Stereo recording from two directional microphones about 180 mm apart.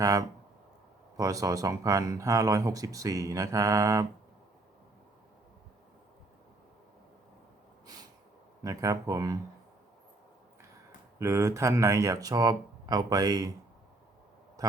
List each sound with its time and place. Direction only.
0.0 s speech: 20° right (ahead or behind)
7.9 s snort: 20° right (ahead or behind)
8.6 s speech: 20° right (ahead or behind)
11.2 s speech: 15° right (ahead or behind)
14.6 s a sound: 20° right (ahead or behind)